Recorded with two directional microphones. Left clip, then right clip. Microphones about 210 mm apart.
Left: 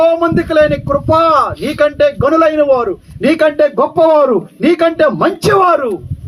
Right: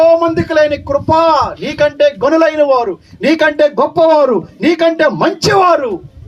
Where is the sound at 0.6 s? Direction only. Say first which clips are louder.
Even; 45° right (ahead or behind).